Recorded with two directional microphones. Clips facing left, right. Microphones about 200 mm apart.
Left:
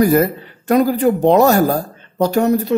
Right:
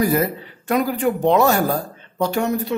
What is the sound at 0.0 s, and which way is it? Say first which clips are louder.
Speech: left 5 dB; 50° left (ahead or behind).